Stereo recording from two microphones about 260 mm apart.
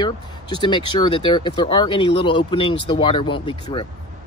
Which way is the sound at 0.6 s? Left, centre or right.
Centre.